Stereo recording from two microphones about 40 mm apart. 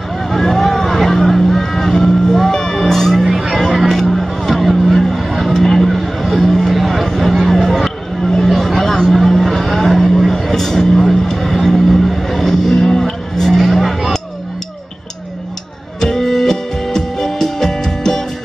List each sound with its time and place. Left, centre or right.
0.3 s vehicle: centre
2.3 s music: centre
3.3 s music: centre
4.0 s vehicle: centre
5.9 s a sound: centre
9.1 s vehicle: centre
16.0 s music: centre